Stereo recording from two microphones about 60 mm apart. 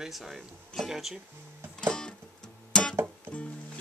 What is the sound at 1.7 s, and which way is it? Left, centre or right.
Music, centre.